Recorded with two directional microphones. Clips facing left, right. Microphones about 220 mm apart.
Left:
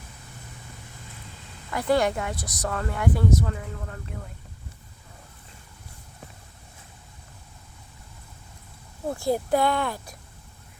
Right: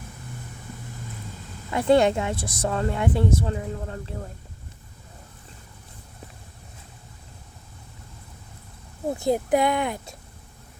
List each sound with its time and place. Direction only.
1.7 s speech: 25° right (ahead or behind)
9.0 s speech: 20° right (ahead or behind)